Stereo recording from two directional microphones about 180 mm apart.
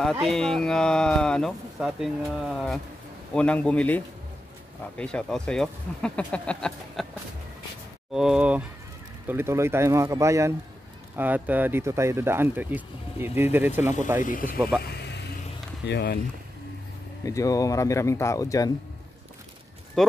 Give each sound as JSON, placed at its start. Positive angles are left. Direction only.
{"t": 0.1, "sound": "speech", "side_deg": 0}
{"t": 8.1, "sound": "speech", "side_deg": -5}
{"t": 14.2, "sound": "speech", "side_deg": 50}
{"t": 15.9, "sound": "speech", "side_deg": 65}
{"t": 17.2, "sound": "speech", "side_deg": 20}
{"t": 20.0, "sound": "speech", "side_deg": 0}